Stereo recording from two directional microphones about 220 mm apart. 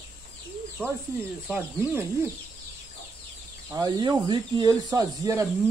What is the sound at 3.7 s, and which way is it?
Speech, 15° right (ahead or behind).